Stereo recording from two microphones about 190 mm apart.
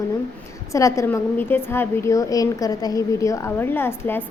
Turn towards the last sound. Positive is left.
turn(degrees=10)  # may be behind; listen again after turning